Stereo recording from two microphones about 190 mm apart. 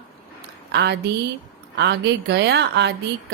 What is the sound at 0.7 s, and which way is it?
A woman's voice, 60° right (ahead or behind).